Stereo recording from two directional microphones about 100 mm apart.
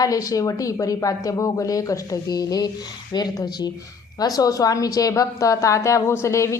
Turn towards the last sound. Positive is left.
turn(degrees=30)  # may be behind; listen again after turning